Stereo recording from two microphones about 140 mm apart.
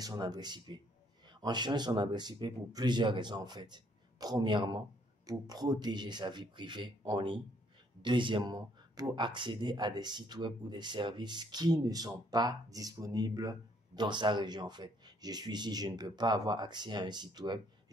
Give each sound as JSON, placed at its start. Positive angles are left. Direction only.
{"t": 0.0, "sound": "speech", "side_deg": -30}